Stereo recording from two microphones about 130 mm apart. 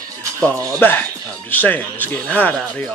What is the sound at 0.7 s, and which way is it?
Speech, 15° left (ahead or behind).